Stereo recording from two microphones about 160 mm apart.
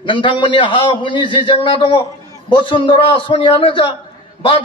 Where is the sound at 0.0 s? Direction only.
30° left (ahead or behind).